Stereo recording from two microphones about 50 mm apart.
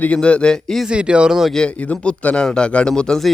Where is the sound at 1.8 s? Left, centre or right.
Left.